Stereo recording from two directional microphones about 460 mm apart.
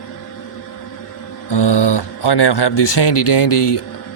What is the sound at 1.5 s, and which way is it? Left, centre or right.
Speech, left.